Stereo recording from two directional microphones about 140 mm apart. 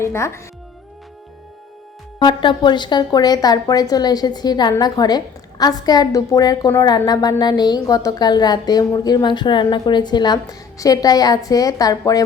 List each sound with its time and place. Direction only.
0.0 s a woman's voice: 20° left (ahead or behind)
2.1 s a woman's voice: 35° left (ahead or behind)